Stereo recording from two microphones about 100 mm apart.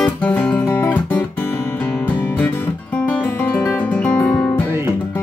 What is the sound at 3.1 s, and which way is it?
Music, 15° left (ahead or behind).